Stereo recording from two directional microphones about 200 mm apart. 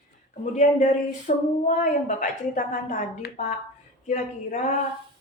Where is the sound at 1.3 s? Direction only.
40° left (ahead or behind).